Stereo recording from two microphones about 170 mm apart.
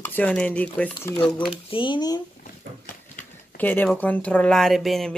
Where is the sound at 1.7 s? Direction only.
25° left (ahead or behind).